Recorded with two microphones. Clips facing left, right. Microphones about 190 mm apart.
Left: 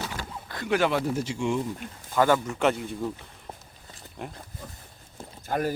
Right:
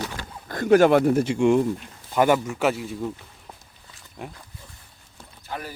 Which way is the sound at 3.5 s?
35° left (ahead or behind).